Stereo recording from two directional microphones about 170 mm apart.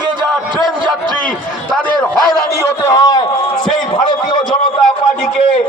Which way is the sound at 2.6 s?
15° left (ahead or behind).